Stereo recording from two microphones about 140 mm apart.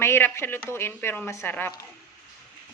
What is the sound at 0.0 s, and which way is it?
Speech, 15° left (ahead or behind).